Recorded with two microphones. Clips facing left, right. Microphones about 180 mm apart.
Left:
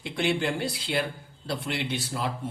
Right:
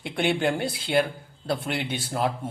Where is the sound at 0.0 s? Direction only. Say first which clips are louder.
Right 3 dB; 55° right (ahead or behind).